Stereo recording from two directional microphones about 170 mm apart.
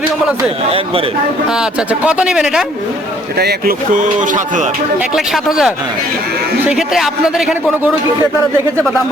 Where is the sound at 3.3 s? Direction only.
70° right (ahead or behind); by 4.7 s 50° right (ahead or behind).